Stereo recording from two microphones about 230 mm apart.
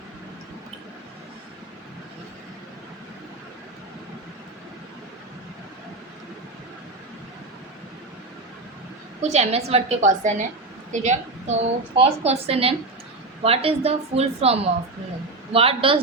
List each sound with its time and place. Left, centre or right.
9.2 s a woman's voice: right